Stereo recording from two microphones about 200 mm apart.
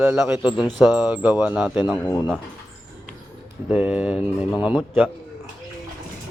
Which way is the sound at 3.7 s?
5° right (ahead or behind).